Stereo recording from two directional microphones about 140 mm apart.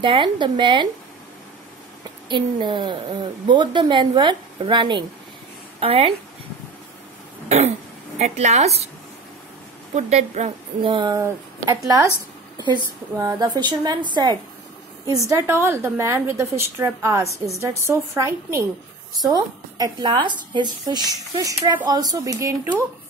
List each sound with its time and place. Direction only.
0.0 s a woman's voice: 35° right (ahead or behind)
2.2 s a woman's voice: 35° right (ahead or behind)
5.8 s a woman's voice: 45° right (ahead or behind)
7.4 s throat clearing: 50° right (ahead or behind)
8.2 s a woman's voice: 55° right (ahead or behind)
9.9 s a woman's voice: 50° right (ahead or behind)
10.9 s a woman's voice: 35° right (ahead or behind)
11.1 s speech: 20° right (ahead or behind)
13.2 s a woman's voice: 25° right (ahead or behind)